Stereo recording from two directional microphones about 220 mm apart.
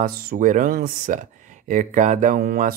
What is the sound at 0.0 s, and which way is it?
Speech, 40° right (ahead or behind).